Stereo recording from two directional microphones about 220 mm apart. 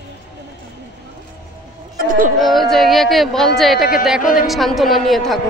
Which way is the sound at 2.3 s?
Centre (ahead or behind).